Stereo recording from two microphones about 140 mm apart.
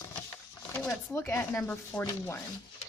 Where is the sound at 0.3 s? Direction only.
15° left (ahead or behind).